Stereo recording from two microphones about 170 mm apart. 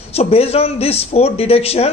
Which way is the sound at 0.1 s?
35° left (ahead or behind).